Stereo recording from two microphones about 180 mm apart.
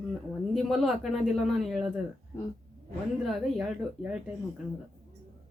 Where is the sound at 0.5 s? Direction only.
Centre (ahead or behind).